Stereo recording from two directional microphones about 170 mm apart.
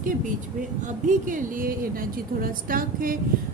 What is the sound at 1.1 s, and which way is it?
A woman's voice, 50° right (ahead or behind).